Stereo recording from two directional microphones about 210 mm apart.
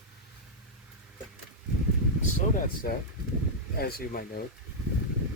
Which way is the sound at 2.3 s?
40° left (ahead or behind).